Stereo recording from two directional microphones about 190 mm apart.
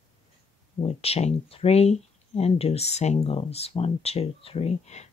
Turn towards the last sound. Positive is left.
turn(degrees=35)  # may be behind; listen again after turning